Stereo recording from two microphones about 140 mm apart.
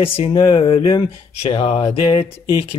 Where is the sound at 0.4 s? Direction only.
40° left (ahead or behind).